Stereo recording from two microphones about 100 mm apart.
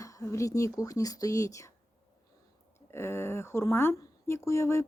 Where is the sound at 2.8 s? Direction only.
25° left (ahead or behind).